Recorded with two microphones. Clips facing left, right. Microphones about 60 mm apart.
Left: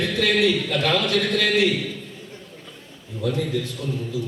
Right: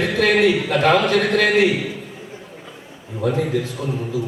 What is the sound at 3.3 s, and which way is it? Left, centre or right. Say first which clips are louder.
Speech: right 4 dB; right.